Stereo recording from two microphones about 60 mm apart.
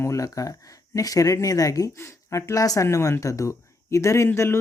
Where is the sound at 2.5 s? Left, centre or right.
Left.